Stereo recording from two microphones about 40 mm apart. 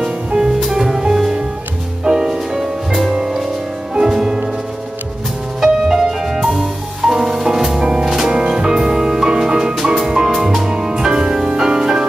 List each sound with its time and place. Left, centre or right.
0.0 s music: centre
5.6 s music: centre